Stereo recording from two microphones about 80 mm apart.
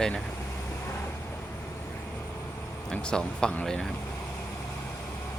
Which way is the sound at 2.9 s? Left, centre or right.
Centre.